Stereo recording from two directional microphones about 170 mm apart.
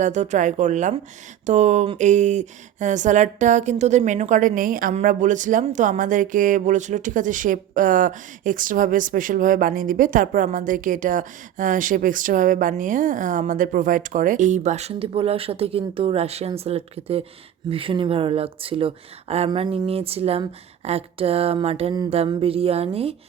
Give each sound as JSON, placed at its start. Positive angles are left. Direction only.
{"t": 0.0, "sound": "speech", "side_deg": -45}
{"t": 19.5, "sound": "speech", "side_deg": -25}
{"t": 19.7, "sound": "speech", "side_deg": -35}